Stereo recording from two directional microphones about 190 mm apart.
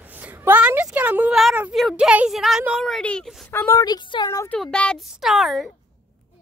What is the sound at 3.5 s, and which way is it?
Speech, 15° left (ahead or behind).